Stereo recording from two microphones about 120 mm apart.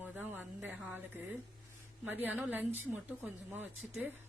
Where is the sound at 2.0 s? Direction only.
15° right (ahead or behind).